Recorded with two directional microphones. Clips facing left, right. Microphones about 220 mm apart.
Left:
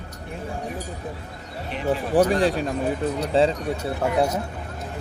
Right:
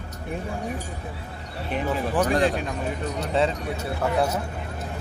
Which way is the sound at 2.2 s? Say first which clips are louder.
Left 3 dB; 35° left (ahead or behind).